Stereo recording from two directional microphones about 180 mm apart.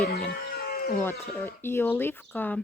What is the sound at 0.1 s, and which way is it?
Livestock, 60° left (ahead or behind).